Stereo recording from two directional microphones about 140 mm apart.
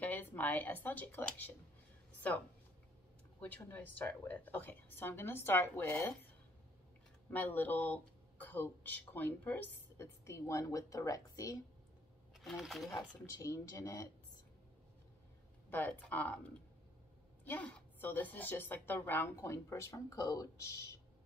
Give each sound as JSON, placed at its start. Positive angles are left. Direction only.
{"t": 0.0, "sound": "speech", "side_deg": 10}
{"t": 3.3, "sound": "speech", "side_deg": 10}
{"t": 7.3, "sound": "speech", "side_deg": 10}
{"t": 12.4, "sound": "speech", "side_deg": 0}
{"t": 12.9, "sound": "speech", "side_deg": 25}
{"t": 15.7, "sound": "speech", "side_deg": 10}
{"t": 17.5, "sound": "speech", "side_deg": 10}